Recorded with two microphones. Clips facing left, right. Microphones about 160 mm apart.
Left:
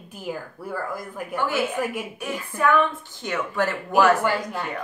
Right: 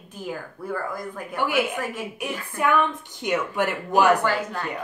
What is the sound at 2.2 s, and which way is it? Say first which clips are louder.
Speech: even; 15° right (ahead or behind).